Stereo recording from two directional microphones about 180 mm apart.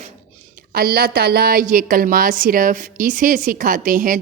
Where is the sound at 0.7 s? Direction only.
60° right (ahead or behind).